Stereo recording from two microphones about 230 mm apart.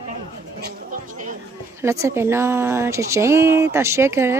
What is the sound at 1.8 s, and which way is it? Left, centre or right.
Speech, centre.